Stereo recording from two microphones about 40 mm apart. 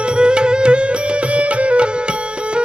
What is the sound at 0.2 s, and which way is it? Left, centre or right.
Music, right.